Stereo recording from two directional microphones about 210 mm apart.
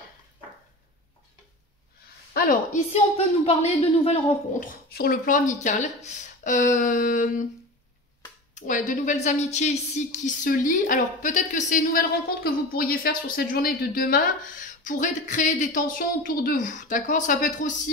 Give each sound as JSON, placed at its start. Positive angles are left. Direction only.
{"t": 2.3, "sound": "speech", "side_deg": 40}
{"t": 8.5, "sound": "speech", "side_deg": 35}